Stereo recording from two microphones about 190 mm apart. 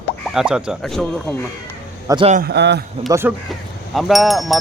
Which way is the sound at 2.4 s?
65° right (ahead or behind).